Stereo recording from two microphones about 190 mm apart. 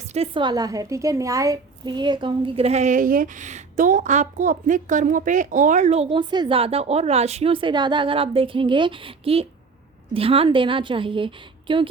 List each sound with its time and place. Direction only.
0.1 s a woman's voice: 30° right (ahead or behind)